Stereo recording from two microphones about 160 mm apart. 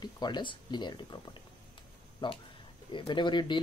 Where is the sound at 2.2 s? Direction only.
30° left (ahead or behind).